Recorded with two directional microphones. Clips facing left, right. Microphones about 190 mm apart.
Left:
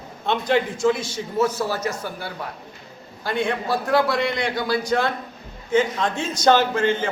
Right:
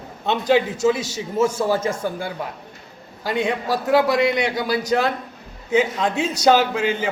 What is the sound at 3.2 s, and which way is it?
A man's voice, 20° right (ahead or behind).